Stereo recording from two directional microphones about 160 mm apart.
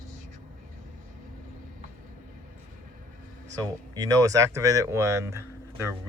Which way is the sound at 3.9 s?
20° right (ahead or behind).